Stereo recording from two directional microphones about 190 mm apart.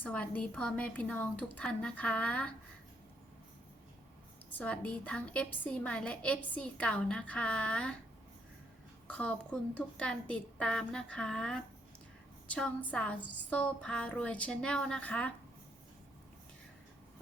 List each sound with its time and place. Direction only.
0.0 s a woman's voice: 5° left (ahead or behind)
4.5 s a woman's voice: 5° left (ahead or behind)
9.0 s a sound: 5° left (ahead or behind)